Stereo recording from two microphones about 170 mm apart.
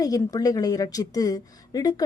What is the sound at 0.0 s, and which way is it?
Speech, 20° left (ahead or behind).